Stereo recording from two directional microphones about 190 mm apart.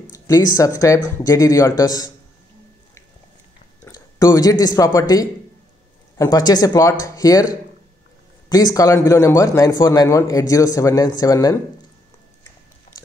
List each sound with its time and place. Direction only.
0.1 s speech: 15° left (ahead or behind)
3.8 s speech: 15° left (ahead or behind)